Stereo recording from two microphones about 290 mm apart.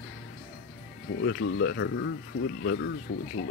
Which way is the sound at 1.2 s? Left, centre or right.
Left.